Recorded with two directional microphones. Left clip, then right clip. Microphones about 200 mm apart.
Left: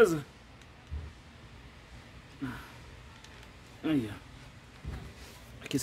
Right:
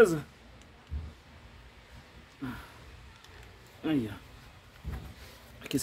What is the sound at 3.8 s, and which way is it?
Speech, centre (ahead or behind).